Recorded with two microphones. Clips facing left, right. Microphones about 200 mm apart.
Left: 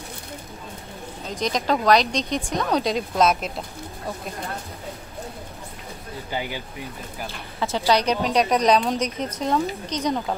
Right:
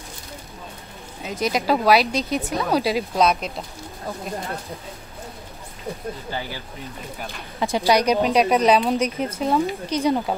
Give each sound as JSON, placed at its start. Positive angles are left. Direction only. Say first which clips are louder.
{"t": 1.2, "sound": "speech", "louder": "right 2 dB", "side_deg": -10}
{"t": 6.3, "sound": "speech", "louder": "left 6 dB", "side_deg": 15}
{"t": 7.2, "sound": "speech", "louder": "right 2 dB", "side_deg": -15}